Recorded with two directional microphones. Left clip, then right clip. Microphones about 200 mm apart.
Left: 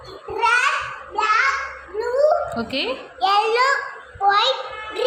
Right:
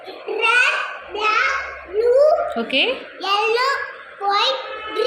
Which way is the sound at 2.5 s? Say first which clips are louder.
Right 5 dB; 5° left (ahead or behind).